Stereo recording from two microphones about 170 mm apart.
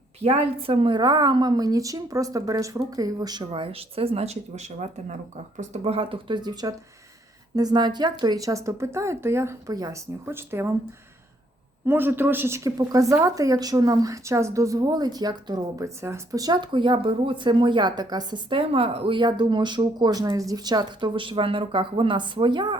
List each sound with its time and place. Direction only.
0.2 s speech: 35° right (ahead or behind); by 10.8 s 15° right (ahead or behind)
11.9 s speech: 10° right (ahead or behind); by 22.8 s 25° right (ahead or behind)